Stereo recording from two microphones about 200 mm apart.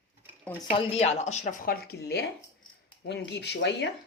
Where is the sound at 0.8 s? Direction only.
30° left (ahead or behind); by 3.8 s 60° left (ahead or behind).